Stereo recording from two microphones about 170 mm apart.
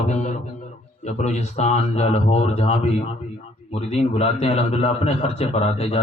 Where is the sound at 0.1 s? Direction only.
40° left (ahead or behind).